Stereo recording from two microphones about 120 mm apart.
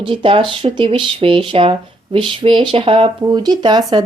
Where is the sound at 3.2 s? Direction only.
35° right (ahead or behind).